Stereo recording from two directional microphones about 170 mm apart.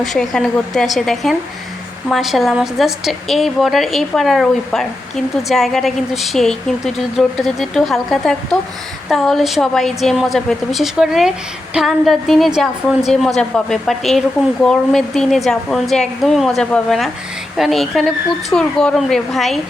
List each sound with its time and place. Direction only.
0.0 s a woman's voice: centre (ahead or behind)